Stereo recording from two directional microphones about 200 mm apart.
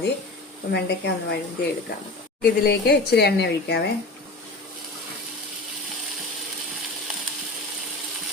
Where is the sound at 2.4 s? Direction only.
50° left (ahead or behind).